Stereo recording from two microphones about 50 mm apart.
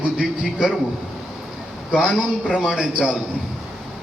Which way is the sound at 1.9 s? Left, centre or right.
Centre.